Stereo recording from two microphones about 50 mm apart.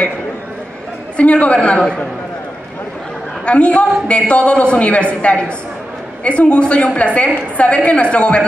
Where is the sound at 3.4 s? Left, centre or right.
Left.